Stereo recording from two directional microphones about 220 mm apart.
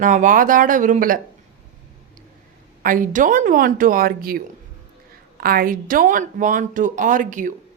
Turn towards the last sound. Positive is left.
turn(degrees=-35)  # may be behind; listen again after turning